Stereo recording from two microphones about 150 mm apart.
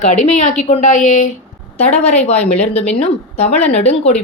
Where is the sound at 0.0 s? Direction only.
50° left (ahead or behind).